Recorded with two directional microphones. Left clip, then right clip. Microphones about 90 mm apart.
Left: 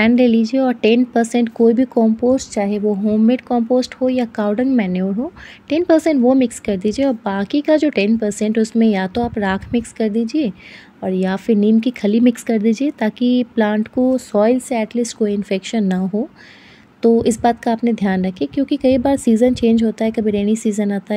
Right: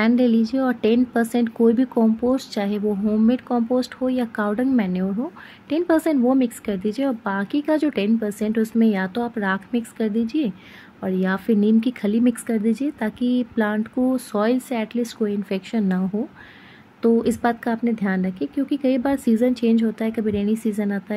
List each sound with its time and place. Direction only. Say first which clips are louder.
0.0 s speech: left 5 dB; 35° left (ahead or behind)
12.1 s speech: left 7 dB; 50° left (ahead or behind); by 15.2 s 30° left (ahead or behind)
15.2 s speech: left 6 dB; 40° left (ahead or behind)
17.0 s speech: left 5 dB; 40° left (ahead or behind)